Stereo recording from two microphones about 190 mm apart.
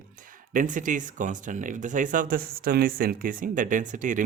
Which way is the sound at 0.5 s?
45° right (ahead or behind).